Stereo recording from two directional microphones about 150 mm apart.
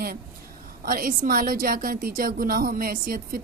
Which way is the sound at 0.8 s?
70° right (ahead or behind).